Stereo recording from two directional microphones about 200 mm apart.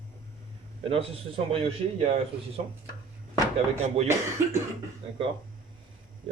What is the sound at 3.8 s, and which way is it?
Speech, 30° right (ahead or behind).